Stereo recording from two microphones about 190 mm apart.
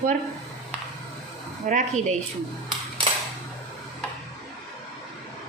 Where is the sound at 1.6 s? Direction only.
40° right (ahead or behind).